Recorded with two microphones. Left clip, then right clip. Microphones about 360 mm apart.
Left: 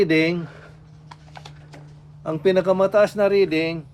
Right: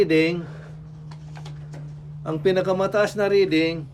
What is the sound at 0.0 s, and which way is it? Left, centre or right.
Speech, centre.